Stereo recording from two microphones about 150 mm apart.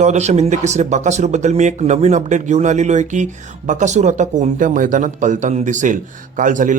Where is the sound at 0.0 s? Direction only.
50° right (ahead or behind).